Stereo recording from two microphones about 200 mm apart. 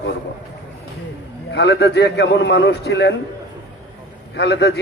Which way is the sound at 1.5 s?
55° left (ahead or behind).